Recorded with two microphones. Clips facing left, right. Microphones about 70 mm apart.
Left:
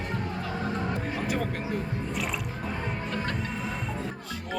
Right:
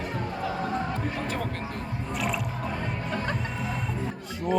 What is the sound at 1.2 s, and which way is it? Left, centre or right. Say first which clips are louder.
Music: left 1 dB; centre.